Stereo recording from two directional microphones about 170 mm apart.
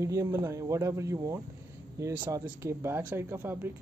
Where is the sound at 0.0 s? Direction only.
20° right (ahead or behind).